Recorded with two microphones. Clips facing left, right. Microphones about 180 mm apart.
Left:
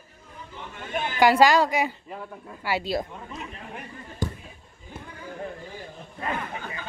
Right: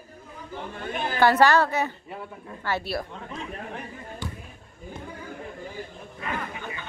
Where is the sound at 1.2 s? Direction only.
10° left (ahead or behind).